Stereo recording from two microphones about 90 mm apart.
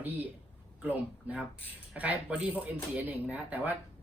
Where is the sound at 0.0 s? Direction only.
20° right (ahead or behind).